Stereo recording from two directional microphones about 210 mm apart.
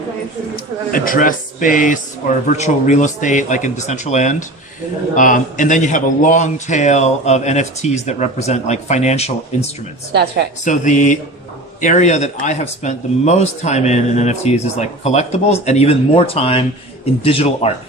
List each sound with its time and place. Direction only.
0.5 s speech: 40° left (ahead or behind)
10.1 s a woman's voice: 50° right (ahead or behind)
10.6 s speech: 35° left (ahead or behind)